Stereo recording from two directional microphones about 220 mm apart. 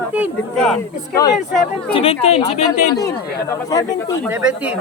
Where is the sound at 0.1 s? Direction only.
Centre (ahead or behind).